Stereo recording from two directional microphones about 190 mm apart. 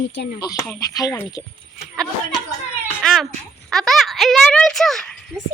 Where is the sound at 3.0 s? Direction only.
Centre (ahead or behind).